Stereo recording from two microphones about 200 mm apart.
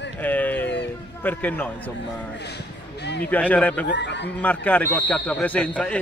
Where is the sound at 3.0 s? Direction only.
55° left (ahead or behind).